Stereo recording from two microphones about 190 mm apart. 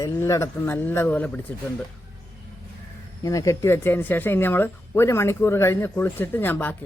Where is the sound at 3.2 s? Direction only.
15° left (ahead or behind).